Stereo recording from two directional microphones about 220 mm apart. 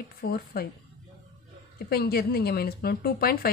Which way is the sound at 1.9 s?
45° left (ahead or behind).